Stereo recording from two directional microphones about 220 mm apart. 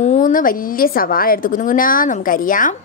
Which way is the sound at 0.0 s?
35° left (ahead or behind).